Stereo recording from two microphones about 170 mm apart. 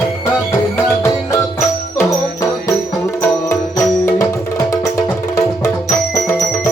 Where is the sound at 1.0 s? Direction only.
15° left (ahead or behind).